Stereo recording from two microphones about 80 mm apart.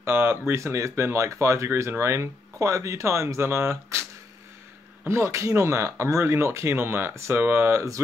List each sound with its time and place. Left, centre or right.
0.0 s speech: right
5.0 s speech: right